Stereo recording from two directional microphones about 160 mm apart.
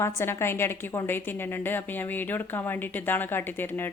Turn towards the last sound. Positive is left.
turn(degrees=15)  # may be behind; listen again after turning